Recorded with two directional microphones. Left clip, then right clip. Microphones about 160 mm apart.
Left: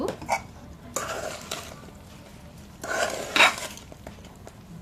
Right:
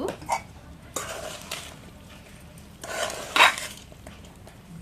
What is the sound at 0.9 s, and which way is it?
Stir, 15° left (ahead or behind).